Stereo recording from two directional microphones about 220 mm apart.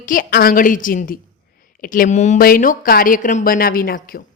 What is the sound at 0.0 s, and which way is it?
A woman's voice, 40° left (ahead or behind).